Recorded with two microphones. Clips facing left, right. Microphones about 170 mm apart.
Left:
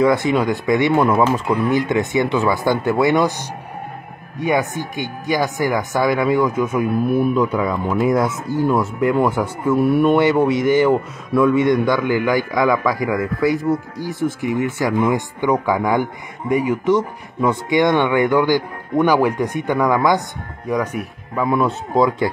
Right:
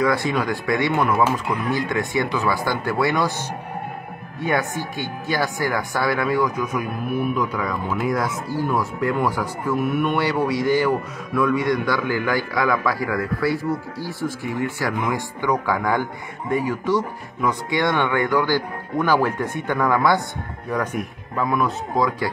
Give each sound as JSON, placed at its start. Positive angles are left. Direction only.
{"t": 0.0, "sound": "speech", "side_deg": 20}
{"t": 10.1, "sound": "speech", "side_deg": 25}
{"t": 21.5, "sound": "speech", "side_deg": 25}